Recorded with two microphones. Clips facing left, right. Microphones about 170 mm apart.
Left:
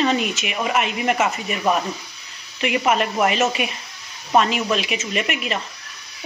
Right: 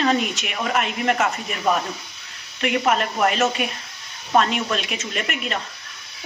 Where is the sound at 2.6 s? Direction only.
5° left (ahead or behind).